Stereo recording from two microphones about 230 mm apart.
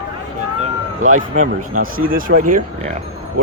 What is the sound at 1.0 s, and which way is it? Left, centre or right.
Speech, right.